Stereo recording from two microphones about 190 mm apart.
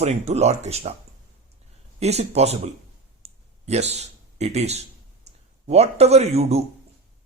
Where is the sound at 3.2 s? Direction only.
35° right (ahead or behind).